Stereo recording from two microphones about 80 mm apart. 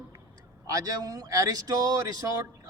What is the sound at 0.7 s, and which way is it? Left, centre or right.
Speech, right.